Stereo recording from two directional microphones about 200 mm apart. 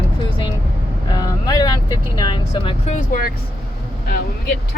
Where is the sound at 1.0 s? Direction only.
20° left (ahead or behind).